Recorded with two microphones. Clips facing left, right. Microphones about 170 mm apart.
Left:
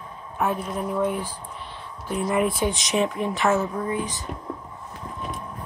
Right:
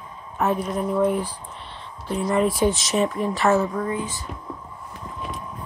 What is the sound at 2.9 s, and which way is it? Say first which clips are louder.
Speech: right 1 dB; centre (ahead or behind).